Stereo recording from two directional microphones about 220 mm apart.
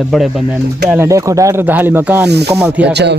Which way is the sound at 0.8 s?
10° right (ahead or behind).